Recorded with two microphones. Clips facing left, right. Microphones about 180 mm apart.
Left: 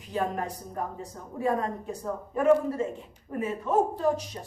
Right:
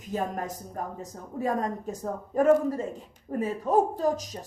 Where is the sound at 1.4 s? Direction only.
40° right (ahead or behind).